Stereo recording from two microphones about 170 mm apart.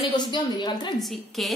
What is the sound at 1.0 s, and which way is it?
Speech, centre (ahead or behind).